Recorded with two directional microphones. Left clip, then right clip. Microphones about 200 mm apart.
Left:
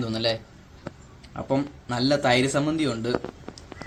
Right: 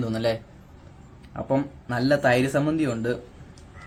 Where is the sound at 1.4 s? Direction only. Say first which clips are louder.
Right 1 dB; 10° right (ahead or behind).